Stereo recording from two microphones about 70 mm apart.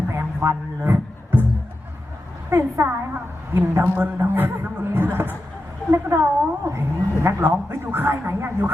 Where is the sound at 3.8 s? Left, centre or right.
Right.